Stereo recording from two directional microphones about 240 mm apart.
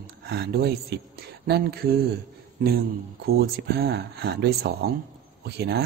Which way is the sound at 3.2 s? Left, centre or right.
Right.